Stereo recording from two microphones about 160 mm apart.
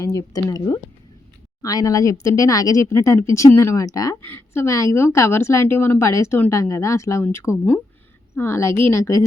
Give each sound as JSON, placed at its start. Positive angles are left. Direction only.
{"t": 0.0, "sound": "speech", "side_deg": 20}